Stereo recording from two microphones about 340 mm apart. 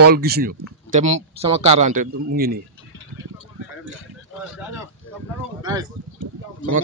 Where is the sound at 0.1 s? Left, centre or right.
Right.